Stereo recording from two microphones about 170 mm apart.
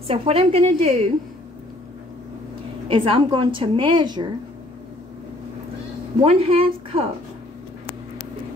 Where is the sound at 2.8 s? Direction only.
30° right (ahead or behind).